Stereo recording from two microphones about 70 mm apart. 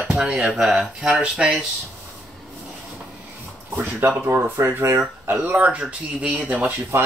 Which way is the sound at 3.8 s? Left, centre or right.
Right.